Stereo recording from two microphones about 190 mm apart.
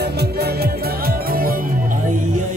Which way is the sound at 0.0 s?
60° right (ahead or behind).